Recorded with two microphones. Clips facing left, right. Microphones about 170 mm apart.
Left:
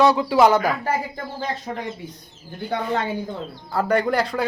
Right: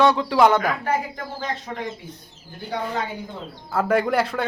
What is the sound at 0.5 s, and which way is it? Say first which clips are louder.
A woman's voice: left 1 dB; 35° left (ahead or behind).